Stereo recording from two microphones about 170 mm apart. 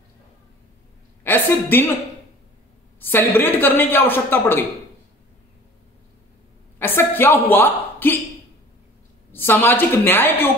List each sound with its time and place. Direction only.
1.2 s a woman's voice: 10° left (ahead or behind)
3.0 s a man's voice: 10° left (ahead or behind)
6.8 s a woman's voice: 10° left (ahead or behind)
9.3 s a man's voice: 10° left (ahead or behind)